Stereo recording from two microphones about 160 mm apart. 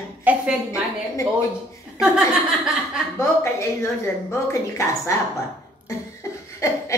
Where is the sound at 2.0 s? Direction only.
5° right (ahead or behind).